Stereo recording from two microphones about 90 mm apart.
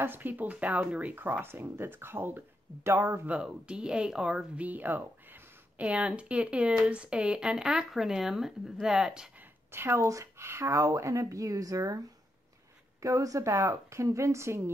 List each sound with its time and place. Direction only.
0.0 s speech: 20° right (ahead or behind)
3.3 s speech: 10° right (ahead or behind)
4.6 s speech: 20° right (ahead or behind)
9.4 s speech: 25° right (ahead or behind)
13.0 s speech: 35° right (ahead or behind)